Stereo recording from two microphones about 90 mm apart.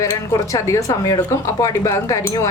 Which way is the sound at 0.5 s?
40° left (ahead or behind).